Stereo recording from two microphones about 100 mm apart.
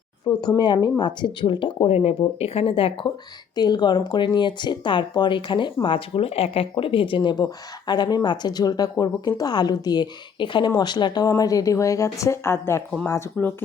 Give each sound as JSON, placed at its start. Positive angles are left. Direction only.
{"t": 0.4, "sound": "speech", "side_deg": 50}
{"t": 3.5, "sound": "speech", "side_deg": 45}
{"t": 5.8, "sound": "a woman's voice", "side_deg": 70}